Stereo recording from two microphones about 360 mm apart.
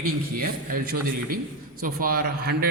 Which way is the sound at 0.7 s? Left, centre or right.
Right.